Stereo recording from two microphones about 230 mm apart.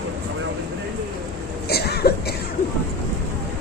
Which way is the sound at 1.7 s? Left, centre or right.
Left.